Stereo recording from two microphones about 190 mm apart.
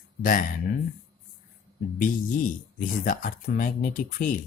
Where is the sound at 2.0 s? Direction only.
45° left (ahead or behind).